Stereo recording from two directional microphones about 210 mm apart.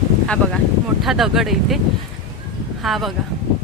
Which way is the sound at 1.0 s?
Centre (ahead or behind).